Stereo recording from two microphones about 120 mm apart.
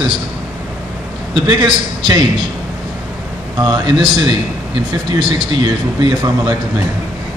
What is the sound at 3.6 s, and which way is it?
A man's voice, 40° right (ahead or behind).